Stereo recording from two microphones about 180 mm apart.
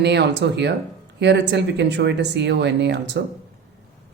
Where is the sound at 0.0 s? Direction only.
70° right (ahead or behind).